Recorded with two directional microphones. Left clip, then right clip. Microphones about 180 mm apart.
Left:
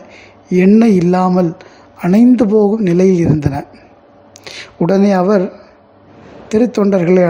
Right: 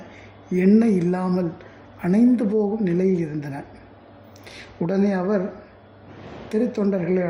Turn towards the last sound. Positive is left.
turn(degrees=40)  # may be behind; listen again after turning